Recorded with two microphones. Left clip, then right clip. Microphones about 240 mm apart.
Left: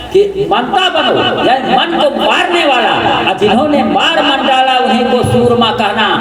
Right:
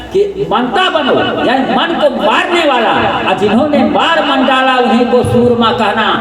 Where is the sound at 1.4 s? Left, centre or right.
Left.